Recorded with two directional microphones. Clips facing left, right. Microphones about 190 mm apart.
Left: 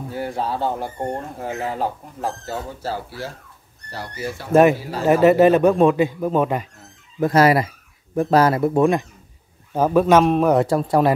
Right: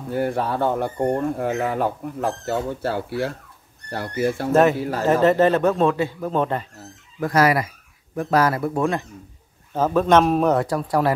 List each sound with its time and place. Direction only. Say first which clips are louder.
0.1 s speech: right 4 dB; 55° right (ahead or behind)
4.5 s speech: left 4 dB; 10° left (ahead or behind)
7.2 s speech: left 3 dB; 25° left (ahead or behind); by 10.5 s centre (ahead or behind)
10.5 s speech: left 3 dB; 25° left (ahead or behind)